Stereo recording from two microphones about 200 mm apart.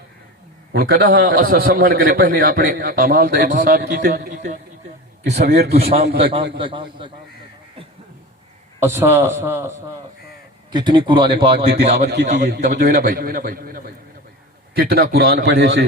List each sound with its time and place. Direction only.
0.7 s a man's voice: 55° right (ahead or behind)
5.2 s a man's voice: 55° right (ahead or behind)
6.1 s speech: 25° right (ahead or behind)
8.8 s a man's voice: 10° right (ahead or behind)
11.5 s a man's voice: 55° right (ahead or behind)
12.8 s a man's voice: 45° right (ahead or behind)
15.4 s a man's voice: 65° right (ahead or behind)